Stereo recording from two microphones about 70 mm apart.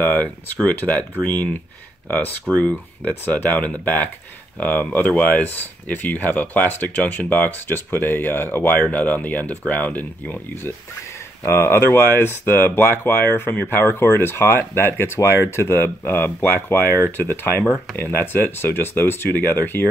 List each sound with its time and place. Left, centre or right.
0.0 s speech: left